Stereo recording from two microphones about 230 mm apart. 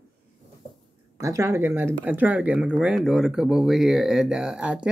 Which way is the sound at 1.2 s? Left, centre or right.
Centre.